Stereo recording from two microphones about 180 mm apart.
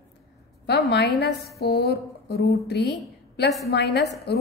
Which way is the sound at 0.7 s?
65° left (ahead or behind).